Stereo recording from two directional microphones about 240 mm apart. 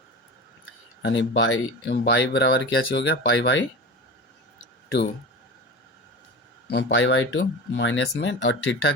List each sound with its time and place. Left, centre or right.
1.0 s speech: left
6.7 s speech: left